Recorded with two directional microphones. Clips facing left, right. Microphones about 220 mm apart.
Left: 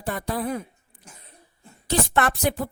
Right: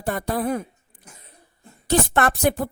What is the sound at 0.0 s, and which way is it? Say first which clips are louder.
Speech: right 3 dB; 50° right (ahead or behind).